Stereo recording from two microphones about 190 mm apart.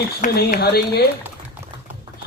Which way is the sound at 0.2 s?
50° left (ahead or behind).